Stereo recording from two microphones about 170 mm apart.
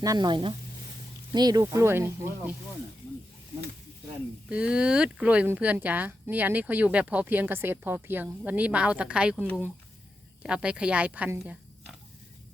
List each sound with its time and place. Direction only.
0.0 s speech: 25° right (ahead or behind)
4.4 s speech: 5° right (ahead or behind)